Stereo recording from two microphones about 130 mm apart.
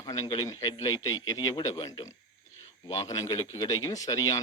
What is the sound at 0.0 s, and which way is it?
Speech, 30° left (ahead or behind).